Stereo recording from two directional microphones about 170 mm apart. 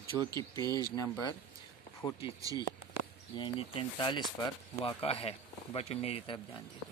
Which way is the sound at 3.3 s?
30° left (ahead or behind).